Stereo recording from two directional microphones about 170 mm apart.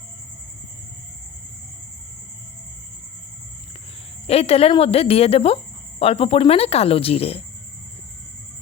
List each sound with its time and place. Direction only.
4.3 s speech: 35° left (ahead or behind)